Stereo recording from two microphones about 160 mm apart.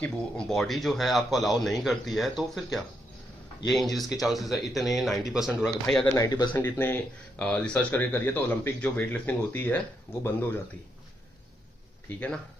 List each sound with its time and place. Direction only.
0.0 s speech: 5° left (ahead or behind)
6.1 s speech: 25° left (ahead or behind)
6.5 s speech: 15° left (ahead or behind)